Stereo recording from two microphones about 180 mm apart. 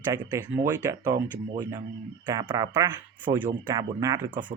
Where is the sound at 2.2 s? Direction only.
20° right (ahead or behind).